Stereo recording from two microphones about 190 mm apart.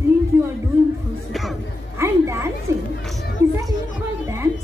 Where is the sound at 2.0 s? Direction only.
15° right (ahead or behind).